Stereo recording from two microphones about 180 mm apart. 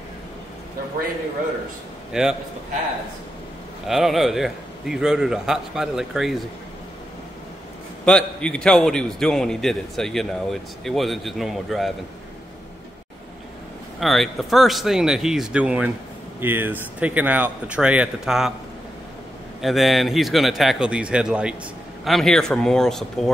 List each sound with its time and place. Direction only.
2.1 s a man's voice: 5° right (ahead or behind)
3.8 s a man's voice: centre (ahead or behind)
8.0 s a man's voice: 5° left (ahead or behind)
13.9 s a man's voice: centre (ahead or behind)
19.6 s a man's voice: centre (ahead or behind)